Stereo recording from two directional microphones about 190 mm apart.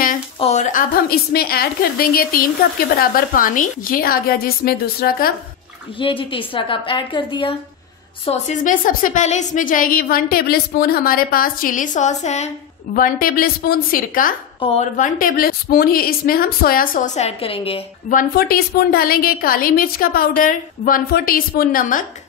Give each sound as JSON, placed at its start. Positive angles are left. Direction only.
{"t": 0.4, "sound": "a woman's voice", "side_deg": 35}
{"t": 5.9, "sound": "a woman's voice", "side_deg": 25}
{"t": 8.3, "sound": "a woman's voice", "side_deg": 40}
{"t": 18.1, "sound": "a woman's voice", "side_deg": 55}